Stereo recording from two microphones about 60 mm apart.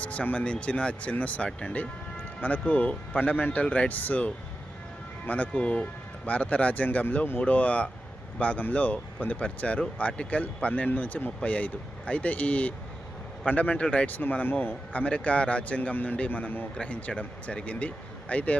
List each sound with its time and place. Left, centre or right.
0.0 s speech: left
14.1 s a man's voice: left
15.0 s speech: left
16.7 s speech: centre